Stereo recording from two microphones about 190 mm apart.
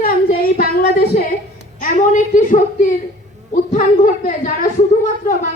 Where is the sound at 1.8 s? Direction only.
40° left (ahead or behind).